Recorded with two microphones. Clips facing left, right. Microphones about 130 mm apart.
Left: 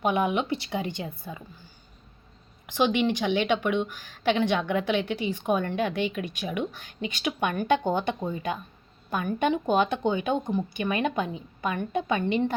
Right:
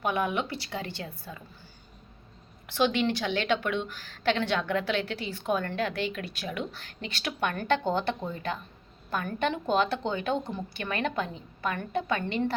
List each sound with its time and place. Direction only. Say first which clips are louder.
0.0 s a woman's voice: left 4 dB; 20° left (ahead or behind)
2.6 s a woman's voice: left 2 dB; 15° left (ahead or behind)